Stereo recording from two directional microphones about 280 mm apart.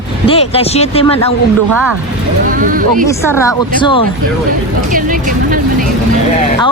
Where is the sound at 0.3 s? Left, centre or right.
Left.